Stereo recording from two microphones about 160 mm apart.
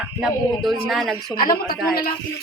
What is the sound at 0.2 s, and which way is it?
Speech, centre (ahead or behind).